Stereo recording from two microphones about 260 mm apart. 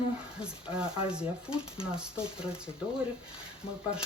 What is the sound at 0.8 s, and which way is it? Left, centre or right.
Speech, centre.